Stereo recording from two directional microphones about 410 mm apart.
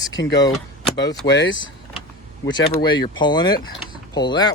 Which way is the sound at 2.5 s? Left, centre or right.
Centre.